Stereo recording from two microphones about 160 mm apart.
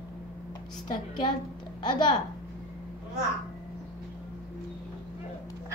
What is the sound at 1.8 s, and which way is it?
Speech, 30° left (ahead or behind).